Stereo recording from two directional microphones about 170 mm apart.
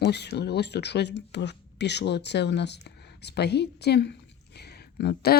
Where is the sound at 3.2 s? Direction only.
75° left (ahead or behind).